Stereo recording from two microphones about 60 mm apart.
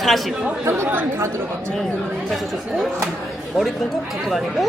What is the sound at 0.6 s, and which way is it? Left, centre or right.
Speech, right.